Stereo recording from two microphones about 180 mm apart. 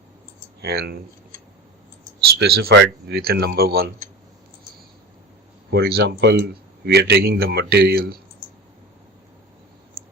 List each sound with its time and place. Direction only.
0.6 s a man's voice: 60° right (ahead or behind)
2.4 s a man's voice: 60° right (ahead or behind)
5.7 s a man's voice: 60° right (ahead or behind)
10.0 s clicking: 60° right (ahead or behind)